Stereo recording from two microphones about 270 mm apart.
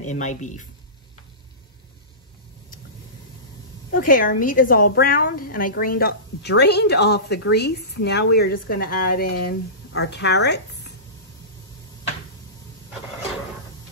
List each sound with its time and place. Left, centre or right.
0.0 s speech: left
3.9 s a woman's voice: left